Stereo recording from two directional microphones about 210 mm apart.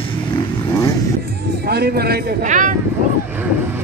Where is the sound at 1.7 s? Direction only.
50° right (ahead or behind).